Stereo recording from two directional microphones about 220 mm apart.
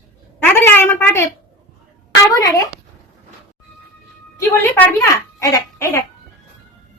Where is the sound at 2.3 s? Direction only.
15° left (ahead or behind).